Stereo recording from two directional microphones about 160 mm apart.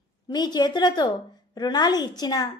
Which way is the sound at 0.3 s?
25° left (ahead or behind).